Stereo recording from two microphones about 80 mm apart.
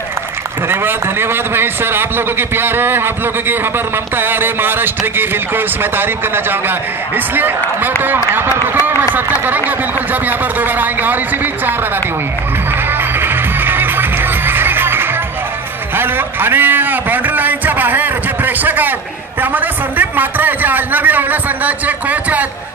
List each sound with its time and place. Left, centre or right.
0.7 s a man's voice: right
12.7 s music: right
15.9 s a man's voice: right